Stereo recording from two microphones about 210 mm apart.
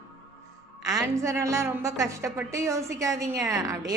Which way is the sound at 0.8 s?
15° right (ahead or behind).